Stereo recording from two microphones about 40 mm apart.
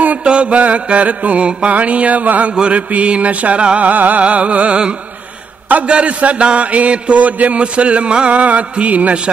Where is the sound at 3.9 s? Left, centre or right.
Right.